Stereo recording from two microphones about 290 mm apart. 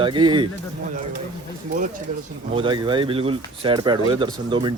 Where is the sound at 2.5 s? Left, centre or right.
Centre.